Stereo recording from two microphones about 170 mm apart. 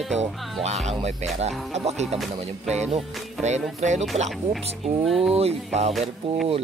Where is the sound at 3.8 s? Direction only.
45° right (ahead or behind).